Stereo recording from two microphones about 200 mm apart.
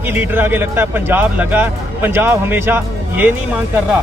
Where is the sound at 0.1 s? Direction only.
10° right (ahead or behind).